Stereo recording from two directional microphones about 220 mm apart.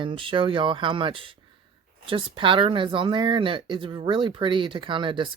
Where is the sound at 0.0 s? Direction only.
25° right (ahead or behind).